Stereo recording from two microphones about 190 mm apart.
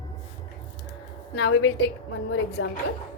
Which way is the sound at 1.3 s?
70° left (ahead or behind).